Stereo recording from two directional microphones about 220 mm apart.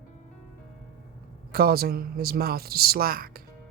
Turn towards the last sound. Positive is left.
turn(degrees=-45)  # may be behind; listen again after turning